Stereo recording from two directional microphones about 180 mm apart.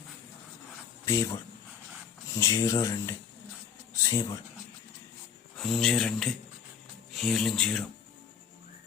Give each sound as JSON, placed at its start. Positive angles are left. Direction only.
{"t": 1.0, "sound": "speech", "side_deg": 15}
{"t": 2.3, "sound": "speech", "side_deg": 15}
{"t": 5.5, "sound": "speech", "side_deg": 0}